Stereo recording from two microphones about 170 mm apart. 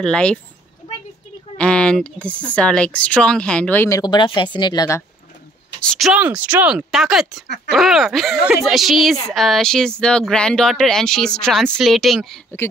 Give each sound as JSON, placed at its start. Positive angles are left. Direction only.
{"t": 0.0, "sound": "speech", "side_deg": 5}
{"t": 1.6, "sound": "speech", "side_deg": 5}
{"t": 4.0, "sound": "speech", "side_deg": 25}
{"t": 5.8, "sound": "speech", "side_deg": 0}
{"t": 7.4, "sound": "speech", "side_deg": 75}
{"t": 7.7, "sound": "speech", "side_deg": 0}